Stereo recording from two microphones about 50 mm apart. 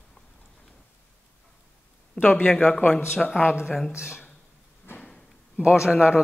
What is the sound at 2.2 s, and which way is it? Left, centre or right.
Speech, left.